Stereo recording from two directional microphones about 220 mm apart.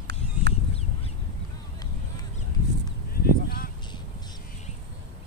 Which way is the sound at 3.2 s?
40° left (ahead or behind).